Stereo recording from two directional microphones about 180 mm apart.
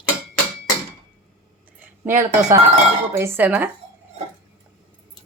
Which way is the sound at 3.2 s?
10° right (ahead or behind).